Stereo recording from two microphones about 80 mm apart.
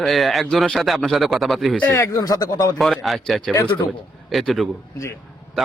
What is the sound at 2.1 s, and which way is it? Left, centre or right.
Speech, left.